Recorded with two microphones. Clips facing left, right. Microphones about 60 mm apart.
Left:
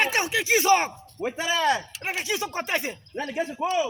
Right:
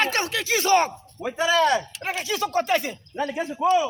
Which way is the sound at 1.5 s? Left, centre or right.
Right.